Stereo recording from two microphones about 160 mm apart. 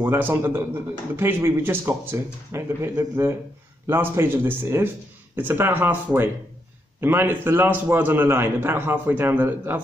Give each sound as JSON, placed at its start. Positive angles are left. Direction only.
{"t": 0.0, "sound": "a man's voice", "side_deg": -15}